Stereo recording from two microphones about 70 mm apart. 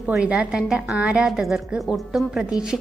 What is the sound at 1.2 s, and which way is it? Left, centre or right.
A woman's voice, centre.